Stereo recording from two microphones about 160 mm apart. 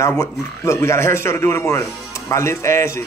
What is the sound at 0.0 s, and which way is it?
Speech, 20° left (ahead or behind).